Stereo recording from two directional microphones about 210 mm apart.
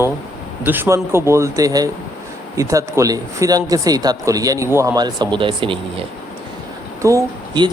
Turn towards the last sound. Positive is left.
turn(degrees=-20)  # may be behind; listen again after turning